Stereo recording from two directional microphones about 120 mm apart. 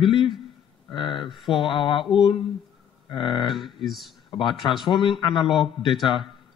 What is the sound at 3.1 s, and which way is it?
Speech, 40° left (ahead or behind).